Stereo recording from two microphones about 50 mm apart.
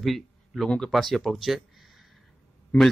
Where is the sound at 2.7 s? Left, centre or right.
Left.